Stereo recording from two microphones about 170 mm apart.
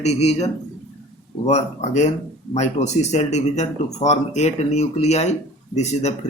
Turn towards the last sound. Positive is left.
turn(degrees=40)  # may be behind; listen again after turning